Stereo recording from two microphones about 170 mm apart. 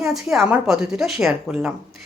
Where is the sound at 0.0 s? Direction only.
Centre (ahead or behind).